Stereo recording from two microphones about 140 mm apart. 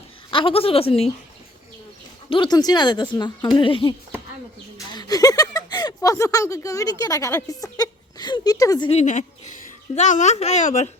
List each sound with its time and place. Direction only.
0.3 s speech: 40° left (ahead or behind)
2.3 s a woman's voice: 30° left (ahead or behind)
4.9 s speech: 30° left (ahead or behind)
8.9 s speech: 55° left (ahead or behind)